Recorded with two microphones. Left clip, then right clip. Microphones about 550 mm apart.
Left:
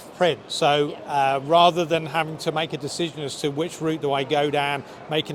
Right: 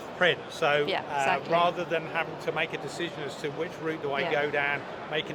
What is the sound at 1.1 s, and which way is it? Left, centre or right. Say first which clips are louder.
A man's voice: left 9 dB; left.